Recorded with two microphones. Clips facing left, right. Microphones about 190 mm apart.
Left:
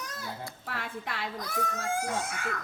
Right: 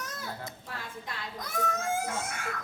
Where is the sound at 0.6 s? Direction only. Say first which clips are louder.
Left 4 dB; 70° left (ahead or behind).